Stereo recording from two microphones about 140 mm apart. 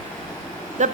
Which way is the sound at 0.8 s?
60° right (ahead or behind).